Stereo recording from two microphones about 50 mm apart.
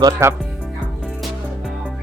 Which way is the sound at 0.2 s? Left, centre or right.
Right.